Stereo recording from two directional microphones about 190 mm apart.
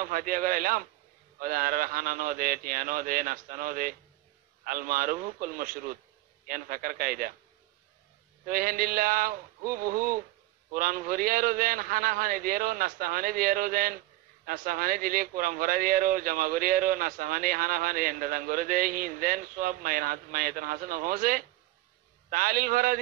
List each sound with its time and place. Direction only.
0.0 s speech: 45° right (ahead or behind)
8.5 s speech: 50° right (ahead or behind)